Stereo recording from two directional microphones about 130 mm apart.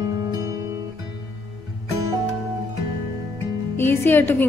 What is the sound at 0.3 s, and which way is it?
Music, 25° right (ahead or behind).